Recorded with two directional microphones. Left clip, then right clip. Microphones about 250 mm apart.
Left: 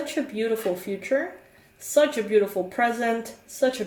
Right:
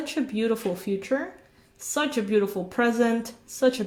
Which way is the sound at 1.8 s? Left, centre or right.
Right.